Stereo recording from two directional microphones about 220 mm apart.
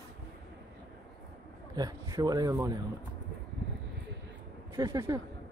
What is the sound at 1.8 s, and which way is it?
Speech, 15° right (ahead or behind).